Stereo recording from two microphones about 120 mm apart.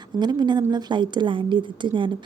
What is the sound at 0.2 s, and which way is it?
A woman's voice, 35° right (ahead or behind).